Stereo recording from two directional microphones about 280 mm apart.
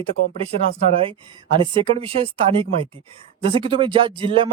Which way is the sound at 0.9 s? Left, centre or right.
Centre.